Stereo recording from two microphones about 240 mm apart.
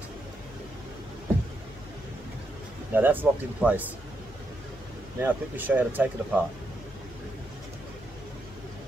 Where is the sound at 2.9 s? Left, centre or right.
Centre.